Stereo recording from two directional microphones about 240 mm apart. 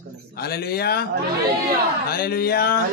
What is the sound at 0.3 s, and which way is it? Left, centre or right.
Speech, left.